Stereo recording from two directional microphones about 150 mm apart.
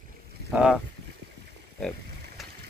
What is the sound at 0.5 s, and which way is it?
Speech, 5° right (ahead or behind).